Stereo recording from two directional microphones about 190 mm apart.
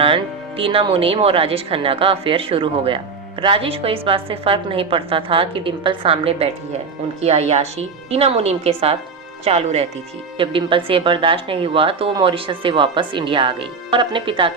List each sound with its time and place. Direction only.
0.0 s a woman's voice: 30° right (ahead or behind)